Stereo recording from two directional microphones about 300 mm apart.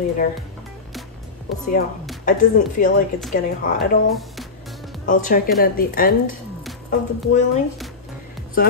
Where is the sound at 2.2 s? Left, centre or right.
Left.